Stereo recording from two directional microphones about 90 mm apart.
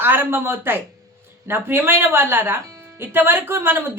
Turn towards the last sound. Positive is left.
turn(degrees=-25)  # may be behind; listen again after turning